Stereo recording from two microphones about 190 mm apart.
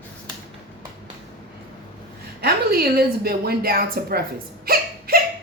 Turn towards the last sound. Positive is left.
turn(degrees=-50)  # may be behind; listen again after turning